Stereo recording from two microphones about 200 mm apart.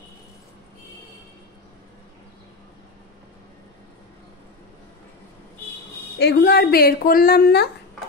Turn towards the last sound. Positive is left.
turn(degrees=50)  # may be behind; listen again after turning